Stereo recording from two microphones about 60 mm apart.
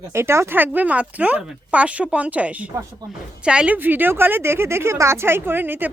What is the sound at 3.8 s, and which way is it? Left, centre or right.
Speech, right.